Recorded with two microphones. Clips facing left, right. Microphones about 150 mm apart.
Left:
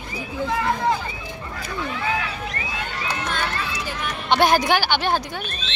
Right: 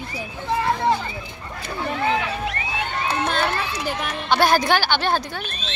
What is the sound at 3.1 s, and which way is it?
Run, 35° right (ahead or behind).